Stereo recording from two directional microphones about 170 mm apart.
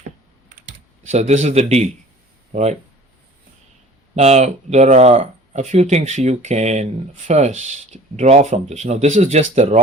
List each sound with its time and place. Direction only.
1.1 s speech: 40° right (ahead or behind)
4.1 s speech: 40° right (ahead or behind)